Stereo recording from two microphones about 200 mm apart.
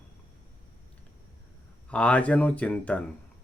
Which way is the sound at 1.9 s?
5° left (ahead or behind).